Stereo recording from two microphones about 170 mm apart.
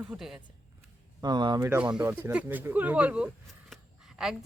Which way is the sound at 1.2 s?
25° right (ahead or behind).